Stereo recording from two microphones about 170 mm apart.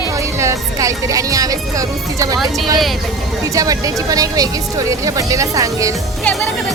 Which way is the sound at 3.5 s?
20° right (ahead or behind).